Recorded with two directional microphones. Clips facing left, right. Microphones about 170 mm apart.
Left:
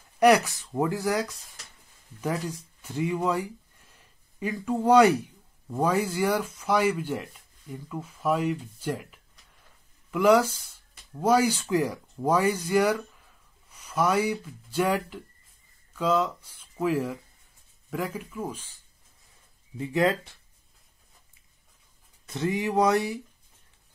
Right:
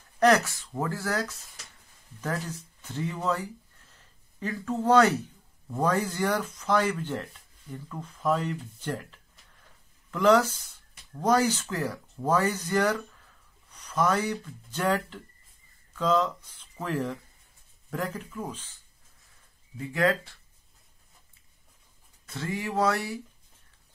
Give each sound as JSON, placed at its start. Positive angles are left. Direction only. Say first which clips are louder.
{"t": 0.2, "sound": "speech", "louder": "left 2 dB", "side_deg": 15}
{"t": 2.3, "sound": "speech", "louder": "left 2 dB", "side_deg": 10}
{"t": 19.8, "sound": "speech", "louder": "left 2 dB", "side_deg": 20}
{"t": 22.2, "sound": "speech", "louder": "left 5 dB", "side_deg": 20}